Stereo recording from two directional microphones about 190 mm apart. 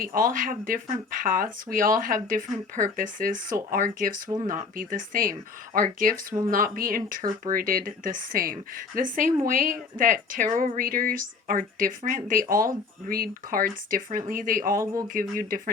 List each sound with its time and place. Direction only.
0.0 s speech: 50° right (ahead or behind)
4.3 s speech: 20° right (ahead or behind)
4.5 s speech: 45° right (ahead or behind)